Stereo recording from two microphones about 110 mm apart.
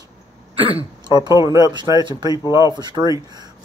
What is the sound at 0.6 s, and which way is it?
Speech, 55° right (ahead or behind).